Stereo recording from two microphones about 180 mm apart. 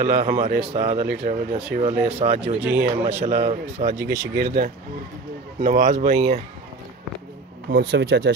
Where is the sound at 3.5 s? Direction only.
40° right (ahead or behind).